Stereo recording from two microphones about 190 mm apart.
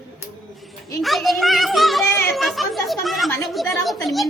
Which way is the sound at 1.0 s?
Centre (ahead or behind).